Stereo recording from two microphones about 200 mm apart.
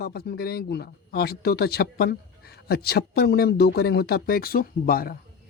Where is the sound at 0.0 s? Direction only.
50° left (ahead or behind).